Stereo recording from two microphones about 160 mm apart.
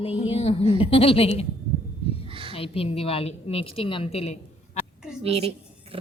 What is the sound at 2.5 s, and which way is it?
A woman's voice, 35° left (ahead or behind).